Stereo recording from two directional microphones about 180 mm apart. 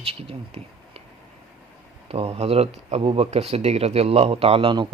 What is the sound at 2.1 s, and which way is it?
Speech, 35° right (ahead or behind).